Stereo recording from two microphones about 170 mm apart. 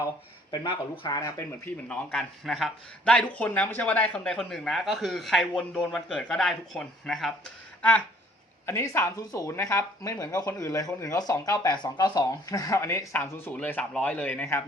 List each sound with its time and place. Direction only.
0.5 s speech: 25° left (ahead or behind)